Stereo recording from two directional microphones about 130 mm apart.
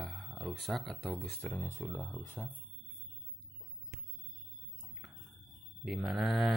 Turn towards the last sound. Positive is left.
turn(degrees=0)  # may be behind; listen again after turning